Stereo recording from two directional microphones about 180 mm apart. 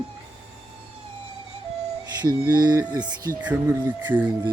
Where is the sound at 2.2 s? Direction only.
20° right (ahead or behind).